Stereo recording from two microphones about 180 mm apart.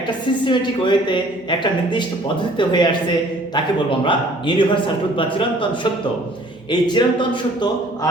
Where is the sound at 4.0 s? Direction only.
25° left (ahead or behind).